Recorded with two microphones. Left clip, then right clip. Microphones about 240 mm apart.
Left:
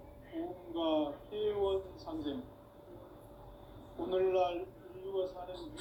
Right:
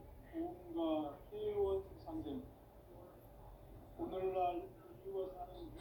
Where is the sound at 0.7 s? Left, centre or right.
Left.